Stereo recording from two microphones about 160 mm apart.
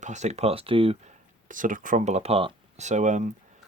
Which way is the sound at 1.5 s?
55° right (ahead or behind).